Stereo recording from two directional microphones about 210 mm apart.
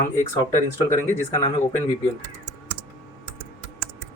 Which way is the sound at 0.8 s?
15° left (ahead or behind).